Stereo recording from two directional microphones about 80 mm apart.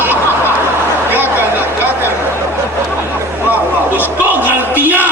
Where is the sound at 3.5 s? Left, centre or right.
Right.